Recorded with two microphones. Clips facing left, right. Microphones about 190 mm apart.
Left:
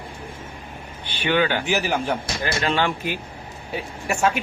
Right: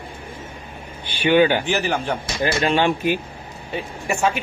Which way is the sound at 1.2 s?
15° right (ahead or behind).